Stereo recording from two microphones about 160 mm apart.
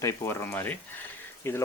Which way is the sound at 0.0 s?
20° left (ahead or behind).